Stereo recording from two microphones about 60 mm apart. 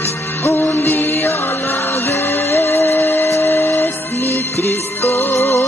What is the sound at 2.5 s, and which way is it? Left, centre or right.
Music, left.